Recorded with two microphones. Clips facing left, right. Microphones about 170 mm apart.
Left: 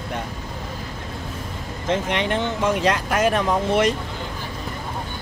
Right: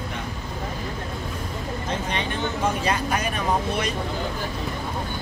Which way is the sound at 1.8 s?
90° left.